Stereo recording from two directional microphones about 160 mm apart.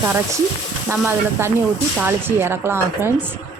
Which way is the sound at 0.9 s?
15° right (ahead or behind).